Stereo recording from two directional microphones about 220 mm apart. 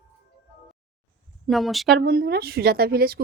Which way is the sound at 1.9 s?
45° right (ahead or behind).